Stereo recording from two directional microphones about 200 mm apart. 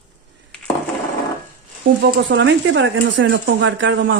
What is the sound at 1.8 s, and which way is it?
Speech, 65° right (ahead or behind).